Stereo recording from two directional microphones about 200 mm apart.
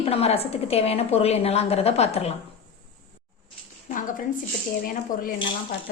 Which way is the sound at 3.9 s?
40° left (ahead or behind).